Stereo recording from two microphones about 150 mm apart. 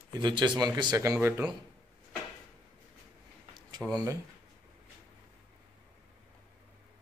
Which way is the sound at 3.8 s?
10° right (ahead or behind).